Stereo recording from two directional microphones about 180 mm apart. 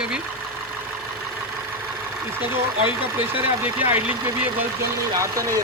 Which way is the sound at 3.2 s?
10° right (ahead or behind).